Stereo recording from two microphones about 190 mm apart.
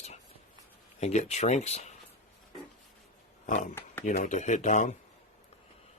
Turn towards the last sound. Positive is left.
turn(degrees=40)  # may be behind; listen again after turning